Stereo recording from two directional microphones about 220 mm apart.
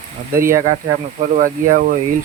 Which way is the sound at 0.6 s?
30° right (ahead or behind).